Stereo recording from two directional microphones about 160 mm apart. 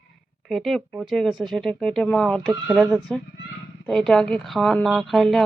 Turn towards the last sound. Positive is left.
turn(degrees=0)  # may be behind; listen again after turning